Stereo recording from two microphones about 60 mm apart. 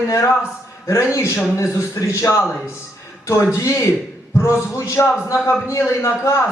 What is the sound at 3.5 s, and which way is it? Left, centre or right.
A man's voice, left.